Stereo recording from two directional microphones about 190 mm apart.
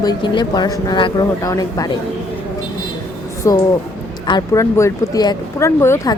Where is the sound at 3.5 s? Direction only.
15° left (ahead or behind).